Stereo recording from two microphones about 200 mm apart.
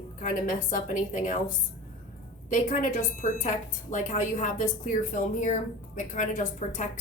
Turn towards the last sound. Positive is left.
turn(degrees=40)  # may be behind; listen again after turning